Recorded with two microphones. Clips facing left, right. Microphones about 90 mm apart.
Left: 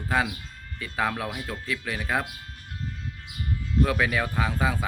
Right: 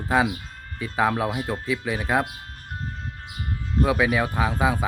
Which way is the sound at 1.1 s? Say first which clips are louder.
Right 7 dB; 35° right (ahead or behind).